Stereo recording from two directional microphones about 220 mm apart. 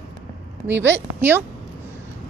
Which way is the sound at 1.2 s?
10° right (ahead or behind).